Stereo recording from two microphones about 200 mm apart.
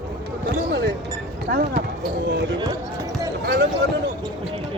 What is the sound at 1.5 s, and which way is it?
Clip-clop, 50° right (ahead or behind).